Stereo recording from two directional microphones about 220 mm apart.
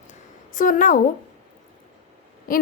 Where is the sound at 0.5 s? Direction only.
40° left (ahead or behind).